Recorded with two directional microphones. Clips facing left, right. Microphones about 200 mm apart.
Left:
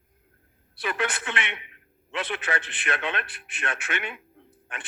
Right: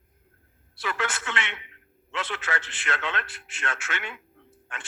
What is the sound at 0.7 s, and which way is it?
A man's voice, 20° left (ahead or behind).